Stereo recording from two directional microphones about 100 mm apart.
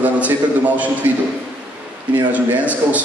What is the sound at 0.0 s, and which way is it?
A man's voice, 15° right (ahead or behind).